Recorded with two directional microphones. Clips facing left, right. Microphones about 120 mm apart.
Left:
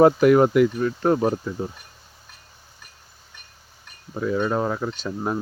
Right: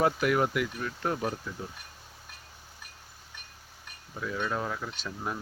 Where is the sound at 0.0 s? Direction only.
35° left (ahead or behind).